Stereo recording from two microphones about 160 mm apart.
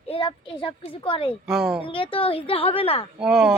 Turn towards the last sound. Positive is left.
turn(degrees=0)  # may be behind; listen again after turning